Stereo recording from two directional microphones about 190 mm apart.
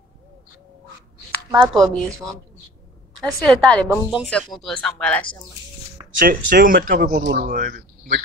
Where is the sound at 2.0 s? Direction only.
15° right (ahead or behind).